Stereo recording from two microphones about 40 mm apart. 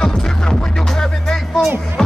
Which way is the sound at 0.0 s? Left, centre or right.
Centre.